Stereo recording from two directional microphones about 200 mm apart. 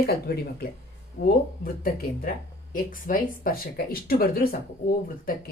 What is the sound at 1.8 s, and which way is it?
A woman's voice, 45° left (ahead or behind).